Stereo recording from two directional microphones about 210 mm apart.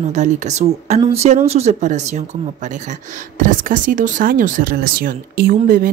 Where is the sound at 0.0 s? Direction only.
35° right (ahead or behind).